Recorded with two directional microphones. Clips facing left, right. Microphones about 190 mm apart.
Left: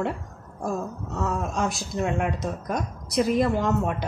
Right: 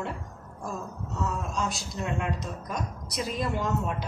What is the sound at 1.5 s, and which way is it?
A woman's voice, 55° left (ahead or behind).